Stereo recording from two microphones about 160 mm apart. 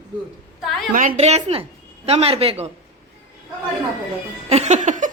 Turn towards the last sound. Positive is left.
turn(degrees=-50)  # may be behind; listen again after turning